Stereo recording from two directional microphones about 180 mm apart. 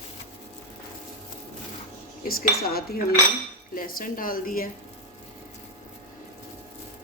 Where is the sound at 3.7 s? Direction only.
50° left (ahead or behind).